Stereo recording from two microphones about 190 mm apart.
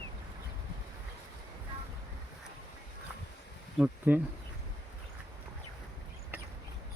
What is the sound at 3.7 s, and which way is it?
Speech, 5° right (ahead or behind).